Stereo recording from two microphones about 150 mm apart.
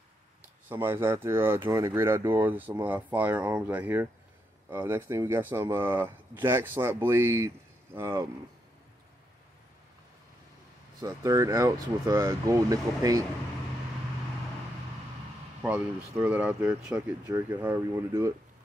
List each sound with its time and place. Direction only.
0.7 s speech: 15° right (ahead or behind)
11.0 s speech: 20° right (ahead or behind)
15.6 s speech: 15° right (ahead or behind)